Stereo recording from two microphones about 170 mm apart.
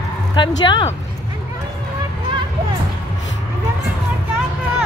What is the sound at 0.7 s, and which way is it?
Speech, 30° left (ahead or behind).